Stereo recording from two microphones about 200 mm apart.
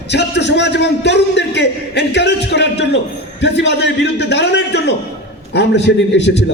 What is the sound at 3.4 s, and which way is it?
A man's voice, 60° left (ahead or behind).